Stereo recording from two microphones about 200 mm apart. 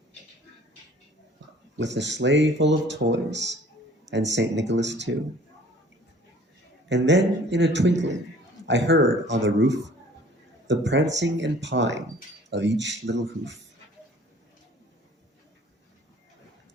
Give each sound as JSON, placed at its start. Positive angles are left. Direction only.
{"t": 1.8, "sound": "speech", "side_deg": -65}
{"t": 6.8, "sound": "a man's voice", "side_deg": -65}